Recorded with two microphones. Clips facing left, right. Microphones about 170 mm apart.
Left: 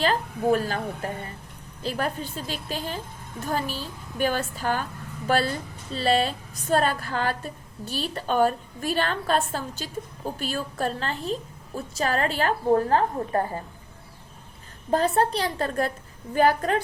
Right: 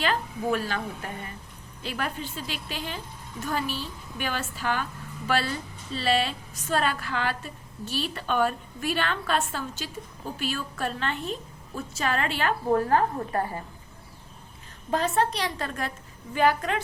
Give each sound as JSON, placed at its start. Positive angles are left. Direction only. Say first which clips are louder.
{"t": 0.0, "sound": "a woman's voice", "louder": "left 4 dB", "side_deg": 40}
{"t": 14.8, "sound": "a woman's voice", "louder": "left 3 dB", "side_deg": 35}